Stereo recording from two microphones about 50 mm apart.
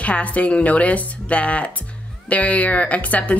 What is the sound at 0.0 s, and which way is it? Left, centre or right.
A woman's voice, left.